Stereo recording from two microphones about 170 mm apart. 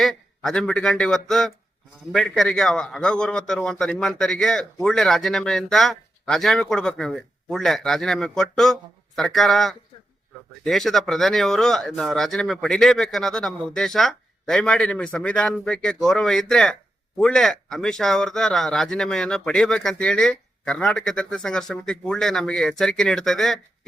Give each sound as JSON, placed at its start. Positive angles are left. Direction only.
{"t": 0.0, "sound": "a man's voice", "side_deg": 0}